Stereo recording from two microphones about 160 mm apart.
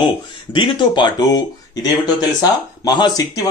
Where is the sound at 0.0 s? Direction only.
30° left (ahead or behind).